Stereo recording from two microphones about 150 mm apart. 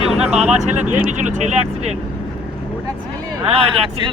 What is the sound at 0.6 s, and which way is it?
Speech, 50° right (ahead or behind).